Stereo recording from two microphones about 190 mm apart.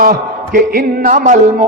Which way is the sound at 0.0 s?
50° right (ahead or behind).